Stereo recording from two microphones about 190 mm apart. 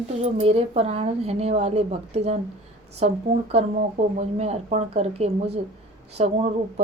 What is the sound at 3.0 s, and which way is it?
A woman's voice, 35° right (ahead or behind).